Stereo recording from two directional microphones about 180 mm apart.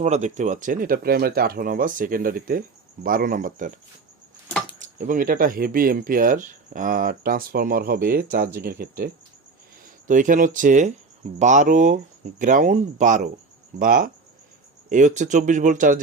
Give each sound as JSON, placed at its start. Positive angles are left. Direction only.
{"t": 0.0, "sound": "speech", "side_deg": -40}
{"t": 4.8, "sound": "speech", "side_deg": -45}